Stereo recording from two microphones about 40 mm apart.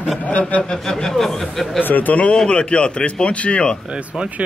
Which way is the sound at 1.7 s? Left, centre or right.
Left.